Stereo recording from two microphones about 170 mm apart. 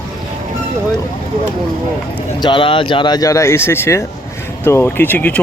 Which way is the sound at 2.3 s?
30° left (ahead or behind).